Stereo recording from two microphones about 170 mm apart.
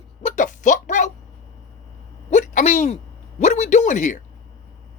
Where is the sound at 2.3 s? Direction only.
45° left (ahead or behind).